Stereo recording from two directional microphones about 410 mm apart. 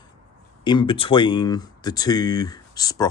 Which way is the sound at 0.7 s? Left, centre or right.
Centre.